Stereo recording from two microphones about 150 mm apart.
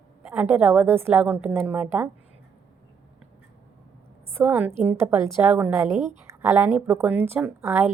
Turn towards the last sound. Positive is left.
turn(degrees=-15)  # may be behind; listen again after turning